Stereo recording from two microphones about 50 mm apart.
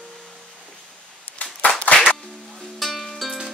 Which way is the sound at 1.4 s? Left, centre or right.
Left.